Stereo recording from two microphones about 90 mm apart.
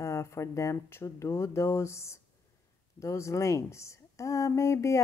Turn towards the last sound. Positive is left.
turn(degrees=35)  # may be behind; listen again after turning